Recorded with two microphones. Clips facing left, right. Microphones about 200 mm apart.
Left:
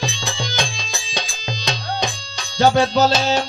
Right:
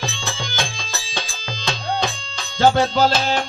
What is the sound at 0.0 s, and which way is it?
Music, 15° left (ahead or behind).